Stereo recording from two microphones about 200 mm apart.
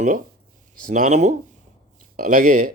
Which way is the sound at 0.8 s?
40° right (ahead or behind).